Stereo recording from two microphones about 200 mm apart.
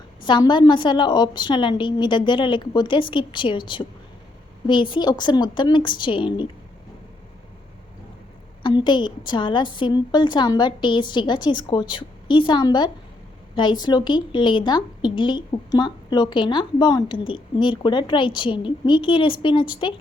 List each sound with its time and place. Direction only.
0.3 s a woman's voice: 25° left (ahead or behind)
8.6 s a woman's voice: 25° left (ahead or behind)